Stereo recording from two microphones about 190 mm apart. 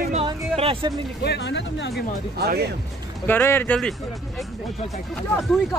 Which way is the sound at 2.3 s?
55° right (ahead or behind).